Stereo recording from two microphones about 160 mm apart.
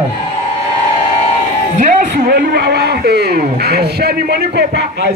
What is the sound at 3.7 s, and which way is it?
Speech, 85° right.